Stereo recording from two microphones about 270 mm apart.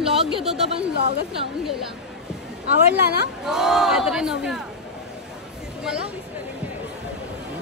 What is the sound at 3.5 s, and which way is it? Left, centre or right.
Speech, centre.